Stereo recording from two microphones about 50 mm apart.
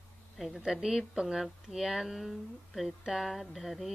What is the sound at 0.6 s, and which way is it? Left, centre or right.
Speech, centre.